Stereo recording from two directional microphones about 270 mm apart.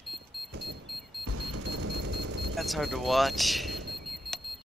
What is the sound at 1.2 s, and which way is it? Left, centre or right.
Music, right.